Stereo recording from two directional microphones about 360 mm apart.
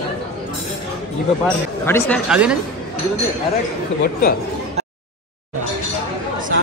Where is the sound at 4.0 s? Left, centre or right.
Left.